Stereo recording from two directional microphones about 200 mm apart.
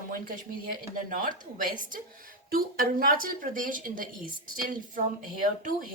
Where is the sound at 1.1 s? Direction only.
40° right (ahead or behind).